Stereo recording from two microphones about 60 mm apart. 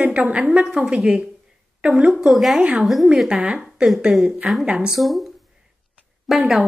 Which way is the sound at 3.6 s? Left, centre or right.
Centre.